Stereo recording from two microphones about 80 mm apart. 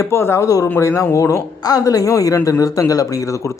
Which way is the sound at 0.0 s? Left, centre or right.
Left.